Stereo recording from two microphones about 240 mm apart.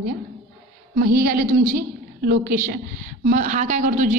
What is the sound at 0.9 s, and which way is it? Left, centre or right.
Speech, right.